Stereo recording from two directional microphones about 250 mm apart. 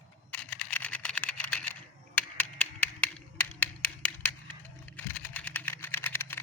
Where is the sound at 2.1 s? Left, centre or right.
Centre.